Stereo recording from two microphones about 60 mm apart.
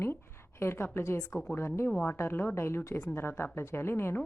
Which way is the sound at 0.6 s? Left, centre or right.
Left.